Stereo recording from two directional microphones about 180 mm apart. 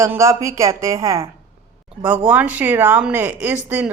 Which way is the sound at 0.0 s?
15° right (ahead or behind).